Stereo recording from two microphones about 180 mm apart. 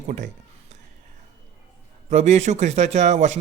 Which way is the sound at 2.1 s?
40° right (ahead or behind).